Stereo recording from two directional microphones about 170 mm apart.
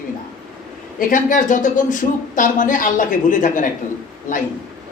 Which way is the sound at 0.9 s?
50° left (ahead or behind).